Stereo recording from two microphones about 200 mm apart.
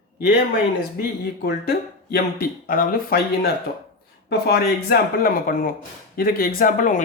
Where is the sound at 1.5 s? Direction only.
50° left (ahead or behind).